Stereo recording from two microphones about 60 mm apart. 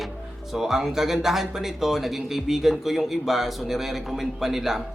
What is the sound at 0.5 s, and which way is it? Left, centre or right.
Speech, centre.